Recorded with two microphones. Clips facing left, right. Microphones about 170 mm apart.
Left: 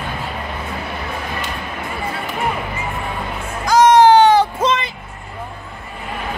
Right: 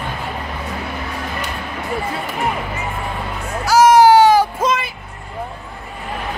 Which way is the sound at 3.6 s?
10° right (ahead or behind).